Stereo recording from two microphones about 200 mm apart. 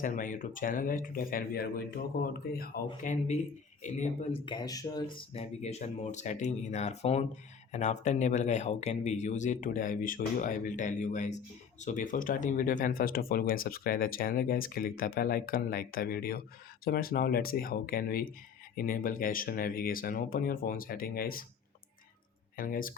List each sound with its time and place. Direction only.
0.0 s speech: 40° left (ahead or behind); by 5.0 s 20° left (ahead or behind)
5.1 s speech: 30° left (ahead or behind); by 21.4 s 45° left (ahead or behind)
22.5 s speech: 45° left (ahead or behind)